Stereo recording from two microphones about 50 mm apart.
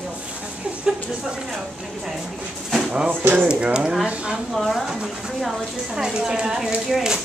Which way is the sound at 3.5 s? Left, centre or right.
Centre.